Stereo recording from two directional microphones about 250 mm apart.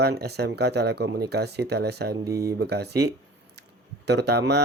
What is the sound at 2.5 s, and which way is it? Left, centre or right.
Speech, right.